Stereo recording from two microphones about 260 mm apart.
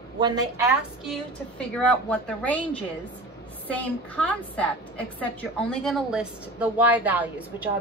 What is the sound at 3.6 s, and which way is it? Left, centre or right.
A woman's voice, centre.